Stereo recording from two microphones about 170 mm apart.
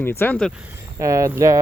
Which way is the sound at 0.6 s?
15° right (ahead or behind).